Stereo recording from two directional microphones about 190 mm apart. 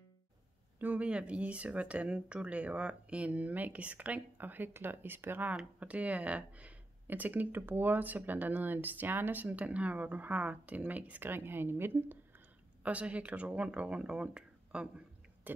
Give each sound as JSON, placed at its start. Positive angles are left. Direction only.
{"t": 0.7, "sound": "speech", "side_deg": -10}